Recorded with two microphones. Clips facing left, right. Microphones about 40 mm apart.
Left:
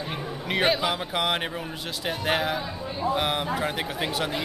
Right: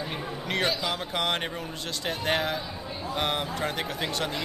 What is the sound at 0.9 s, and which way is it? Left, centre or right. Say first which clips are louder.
Speech: left 2 dB; centre.